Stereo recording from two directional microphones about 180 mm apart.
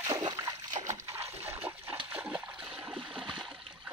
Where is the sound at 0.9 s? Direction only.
15° right (ahead or behind).